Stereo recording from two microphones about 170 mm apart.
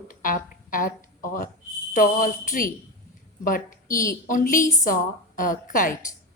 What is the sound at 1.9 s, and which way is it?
A woman's voice, 55° left (ahead or behind).